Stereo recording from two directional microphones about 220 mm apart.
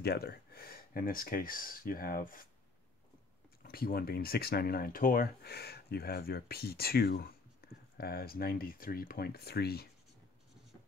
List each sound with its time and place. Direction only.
0.0 s speech: 45° left (ahead or behind)
3.6 s speech: 45° left (ahead or behind)